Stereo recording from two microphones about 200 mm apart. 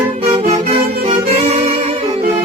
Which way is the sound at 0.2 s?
30° right (ahead or behind).